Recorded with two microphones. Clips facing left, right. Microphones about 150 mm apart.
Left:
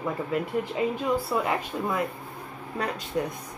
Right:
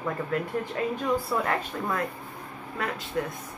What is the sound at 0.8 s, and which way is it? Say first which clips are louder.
Speech: even; 10° left (ahead or behind).